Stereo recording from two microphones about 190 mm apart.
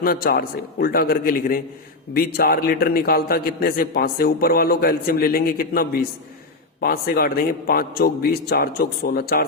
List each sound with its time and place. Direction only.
0.0 s a man's voice: 50° left (ahead or behind)